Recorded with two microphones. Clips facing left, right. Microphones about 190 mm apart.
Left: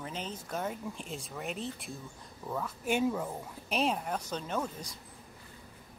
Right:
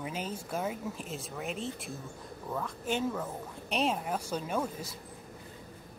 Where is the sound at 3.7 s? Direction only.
Centre (ahead or behind).